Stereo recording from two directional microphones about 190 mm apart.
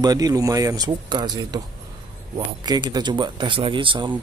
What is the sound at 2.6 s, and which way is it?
Speech, 20° right (ahead or behind).